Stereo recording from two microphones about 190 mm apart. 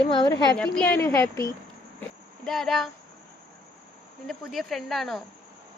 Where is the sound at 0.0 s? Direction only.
20° left (ahead or behind).